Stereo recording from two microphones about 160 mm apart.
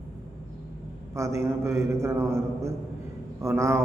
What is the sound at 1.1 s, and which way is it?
A man's voice, 20° right (ahead or behind).